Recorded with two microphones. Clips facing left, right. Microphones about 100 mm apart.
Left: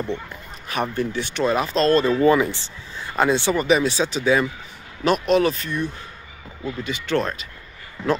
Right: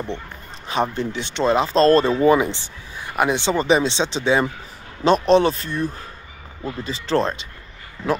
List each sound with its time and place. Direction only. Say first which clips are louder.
0.7 s speech: right 2 dB; 20° right (ahead or behind)
2.1 s speech: right 1 dB; 20° right (ahead or behind)